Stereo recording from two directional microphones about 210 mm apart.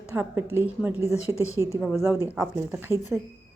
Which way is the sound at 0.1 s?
10° right (ahead or behind).